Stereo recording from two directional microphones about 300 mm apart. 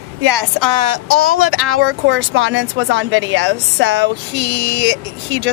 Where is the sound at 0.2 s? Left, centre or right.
Right.